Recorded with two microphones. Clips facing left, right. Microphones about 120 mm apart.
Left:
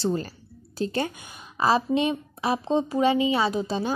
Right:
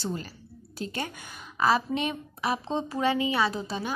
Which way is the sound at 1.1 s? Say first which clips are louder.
Left 1 dB; 20° left (ahead or behind).